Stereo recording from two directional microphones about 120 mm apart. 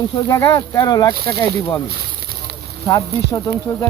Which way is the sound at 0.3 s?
20° left (ahead or behind).